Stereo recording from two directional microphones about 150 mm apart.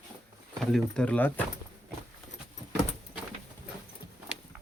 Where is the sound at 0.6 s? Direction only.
Centre (ahead or behind).